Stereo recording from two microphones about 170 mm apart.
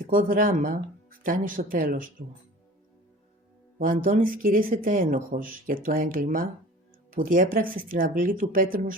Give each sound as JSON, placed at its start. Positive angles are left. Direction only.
{"t": 0.1, "sound": "speech", "side_deg": -55}
{"t": 3.8, "sound": "speech", "side_deg": -55}